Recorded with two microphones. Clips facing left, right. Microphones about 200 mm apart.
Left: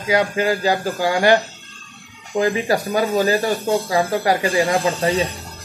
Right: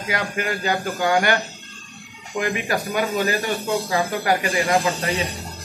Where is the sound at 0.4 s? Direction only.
35° left (ahead or behind).